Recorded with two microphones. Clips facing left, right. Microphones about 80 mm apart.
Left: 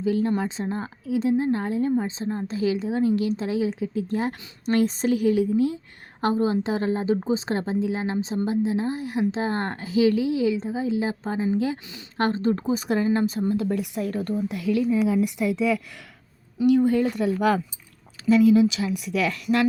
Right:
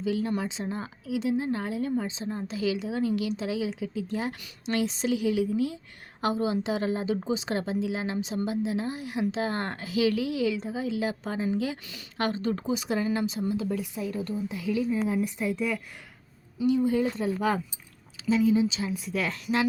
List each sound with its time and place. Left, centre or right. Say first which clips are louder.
0.0 s a woman's voice: left 5 dB; left
16.6 s a woman's voice: left 5 dB; left